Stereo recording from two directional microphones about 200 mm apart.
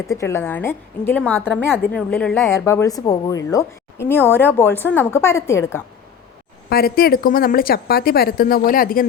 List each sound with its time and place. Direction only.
0.1 s speech: 15° left (ahead or behind)
6.7 s a woman's voice: 50° left (ahead or behind)